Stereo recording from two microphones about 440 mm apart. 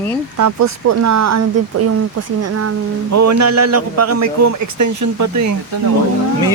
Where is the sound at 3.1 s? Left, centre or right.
Right.